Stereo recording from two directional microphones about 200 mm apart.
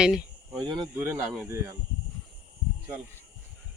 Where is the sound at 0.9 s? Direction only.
10° right (ahead or behind).